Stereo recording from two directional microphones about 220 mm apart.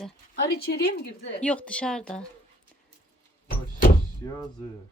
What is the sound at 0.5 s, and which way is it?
Speech, 45° left (ahead or behind).